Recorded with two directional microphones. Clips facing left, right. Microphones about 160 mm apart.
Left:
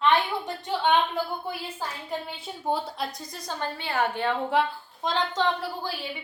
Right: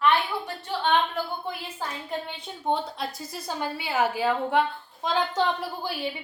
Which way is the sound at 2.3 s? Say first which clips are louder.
Right 2 dB; 5° left (ahead or behind).